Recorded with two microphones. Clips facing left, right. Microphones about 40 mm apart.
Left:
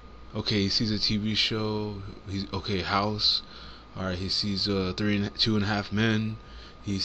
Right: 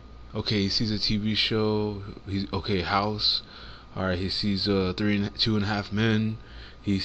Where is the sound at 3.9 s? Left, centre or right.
Centre.